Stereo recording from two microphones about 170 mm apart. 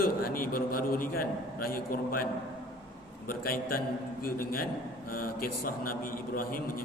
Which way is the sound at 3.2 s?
60° left (ahead or behind).